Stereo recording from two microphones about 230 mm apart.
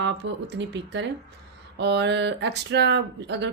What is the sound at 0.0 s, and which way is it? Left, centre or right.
Speech, right.